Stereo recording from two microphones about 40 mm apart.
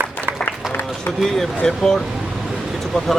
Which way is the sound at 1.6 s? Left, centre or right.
Centre.